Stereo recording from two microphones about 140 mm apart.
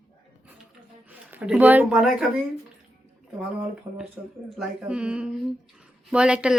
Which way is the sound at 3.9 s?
20° right (ahead or behind).